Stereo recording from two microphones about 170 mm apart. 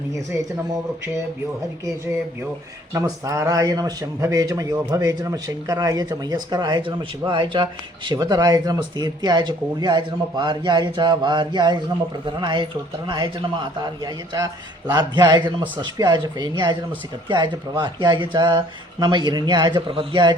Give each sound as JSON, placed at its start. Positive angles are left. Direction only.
{"t": 0.1, "sound": "speech", "side_deg": -15}
{"t": 2.9, "sound": "a man's voice", "side_deg": -15}